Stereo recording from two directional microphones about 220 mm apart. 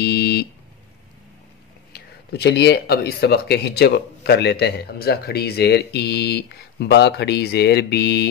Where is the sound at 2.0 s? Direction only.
50° left (ahead or behind).